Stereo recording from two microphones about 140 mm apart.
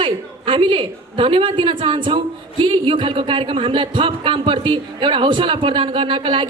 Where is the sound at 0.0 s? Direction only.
35° right (ahead or behind).